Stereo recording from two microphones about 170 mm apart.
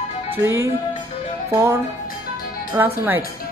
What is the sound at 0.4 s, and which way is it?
Speech, 15° right (ahead or behind).